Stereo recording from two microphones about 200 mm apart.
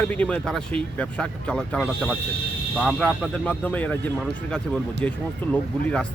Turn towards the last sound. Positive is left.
turn(degrees=5)  # may be behind; listen again after turning